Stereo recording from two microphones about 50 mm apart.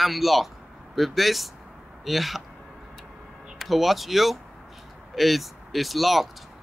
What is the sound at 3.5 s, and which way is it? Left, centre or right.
Speech, centre.